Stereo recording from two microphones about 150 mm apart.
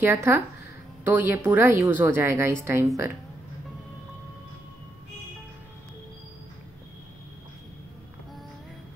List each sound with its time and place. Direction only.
0.0 s a woman's voice: 15° right (ahead or behind)